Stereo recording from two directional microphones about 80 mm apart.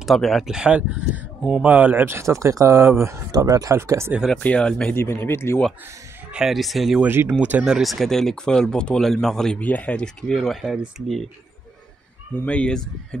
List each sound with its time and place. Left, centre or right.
0.0 s speech: centre
0.6 s speech: centre; by 3.2 s right
3.3 s speech: right
4.4 s speech: centre
4.9 s speech: left
6.3 s speech: centre
7.1 s speech: right
7.3 s speech: centre
7.6 s speech: centre
9.6 s speech: centre
12.4 s speech: centre